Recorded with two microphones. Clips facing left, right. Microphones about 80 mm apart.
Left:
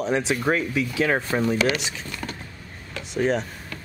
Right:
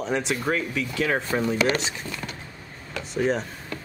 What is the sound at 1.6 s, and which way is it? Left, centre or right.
Speech, right.